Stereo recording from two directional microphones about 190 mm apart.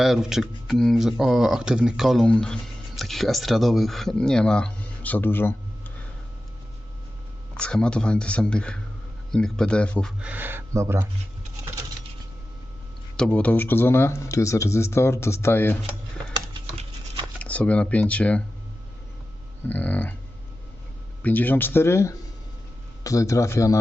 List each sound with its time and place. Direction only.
0.0 s speech: centre (ahead or behind)
7.5 s speech: 5° left (ahead or behind)
10.2 s speech: 10° right (ahead or behind)
13.1 s speech: 5° left (ahead or behind)
16.6 s a sound: 25° right (ahead or behind)
17.4 s speech: 5° left (ahead or behind)
19.6 s speech: 10° left (ahead or behind)
21.2 s speech: 10° left (ahead or behind)